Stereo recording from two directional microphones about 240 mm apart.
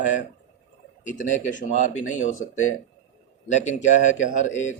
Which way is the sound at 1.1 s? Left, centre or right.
Left.